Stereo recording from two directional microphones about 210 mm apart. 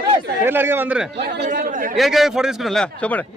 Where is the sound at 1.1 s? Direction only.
55° right (ahead or behind).